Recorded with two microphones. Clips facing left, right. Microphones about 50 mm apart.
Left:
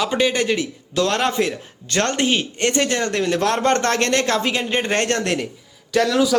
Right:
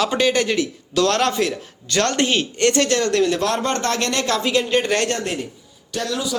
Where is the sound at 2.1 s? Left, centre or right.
Centre; by 5.1 s left.